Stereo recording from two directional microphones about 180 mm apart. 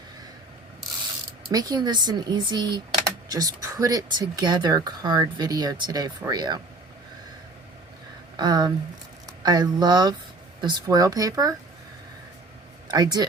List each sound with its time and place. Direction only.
1.5 s speech: 20° right (ahead or behind)
8.4 s speech: 25° right (ahead or behind)
12.9 s speech: 20° right (ahead or behind)